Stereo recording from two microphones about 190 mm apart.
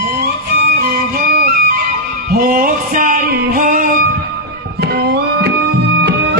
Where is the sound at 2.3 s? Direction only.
50° right (ahead or behind).